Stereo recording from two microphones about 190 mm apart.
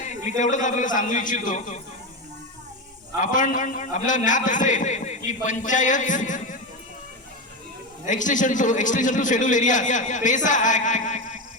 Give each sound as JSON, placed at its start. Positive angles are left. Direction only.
{"t": 0.3, "sound": "a man's voice", "side_deg": 40}
{"t": 3.2, "sound": "a man's voice", "side_deg": 45}
{"t": 8.0, "sound": "a man's voice", "side_deg": 40}